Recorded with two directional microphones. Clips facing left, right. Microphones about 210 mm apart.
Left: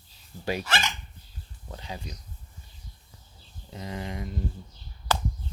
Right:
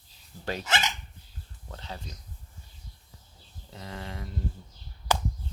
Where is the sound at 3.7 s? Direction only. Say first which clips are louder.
Left 4 dB; 15° left (ahead or behind).